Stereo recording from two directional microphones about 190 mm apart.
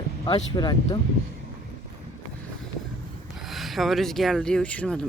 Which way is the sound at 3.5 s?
Centre (ahead or behind).